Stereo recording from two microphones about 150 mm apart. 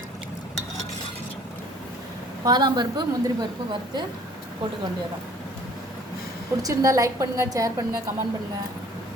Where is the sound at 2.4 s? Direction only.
30° right (ahead or behind).